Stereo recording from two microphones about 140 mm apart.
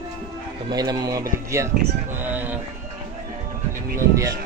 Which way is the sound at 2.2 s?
15° right (ahead or behind).